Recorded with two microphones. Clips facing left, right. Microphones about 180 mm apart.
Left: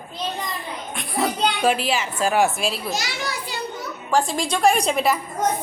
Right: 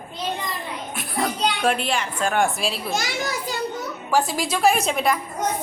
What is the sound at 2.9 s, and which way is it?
Speech, 50° right (ahead or behind).